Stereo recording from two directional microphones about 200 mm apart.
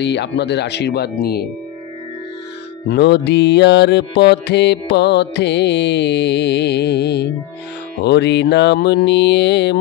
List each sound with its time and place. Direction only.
0.0 s mantra: 60° left (ahead or behind)
2.9 s mantra: 55° left (ahead or behind)